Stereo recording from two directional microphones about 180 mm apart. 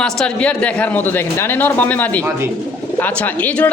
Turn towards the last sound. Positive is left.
turn(degrees=10)  # may be behind; listen again after turning